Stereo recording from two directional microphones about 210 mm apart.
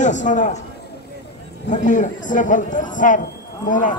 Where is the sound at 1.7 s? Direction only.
35° left (ahead or behind).